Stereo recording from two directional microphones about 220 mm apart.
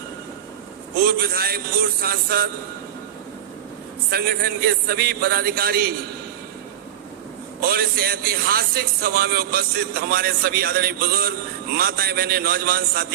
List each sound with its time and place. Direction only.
0.9 s a man's voice: 45° right (ahead or behind)
4.1 s a man's voice: 45° right (ahead or behind)
7.6 s a man's voice: 45° right (ahead or behind)